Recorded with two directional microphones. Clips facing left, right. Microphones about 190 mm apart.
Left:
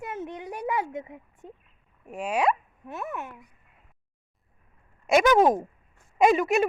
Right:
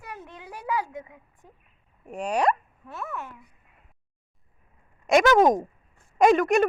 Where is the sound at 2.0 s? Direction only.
5° left (ahead or behind).